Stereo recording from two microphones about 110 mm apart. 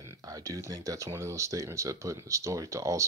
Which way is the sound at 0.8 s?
30° right (ahead or behind).